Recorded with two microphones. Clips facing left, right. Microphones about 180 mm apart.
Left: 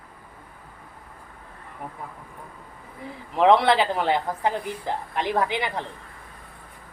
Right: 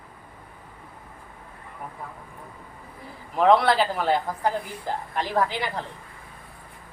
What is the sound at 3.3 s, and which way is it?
A woman's voice, 20° left (ahead or behind).